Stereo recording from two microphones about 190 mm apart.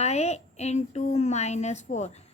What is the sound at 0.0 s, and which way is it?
A woman's voice, 35° left (ahead or behind).